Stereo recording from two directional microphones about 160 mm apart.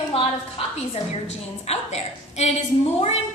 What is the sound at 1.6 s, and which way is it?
Speech, 40° left (ahead or behind).